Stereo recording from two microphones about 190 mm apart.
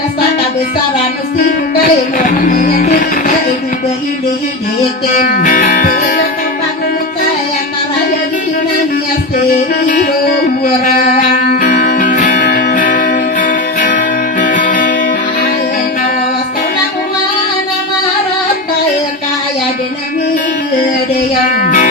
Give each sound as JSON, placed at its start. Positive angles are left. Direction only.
{"t": 1.4, "sound": "music", "side_deg": 50}
{"t": 5.0, "sound": "music", "side_deg": 45}
{"t": 9.5, "sound": "music", "side_deg": 45}
{"t": 21.5, "sound": "music", "side_deg": 45}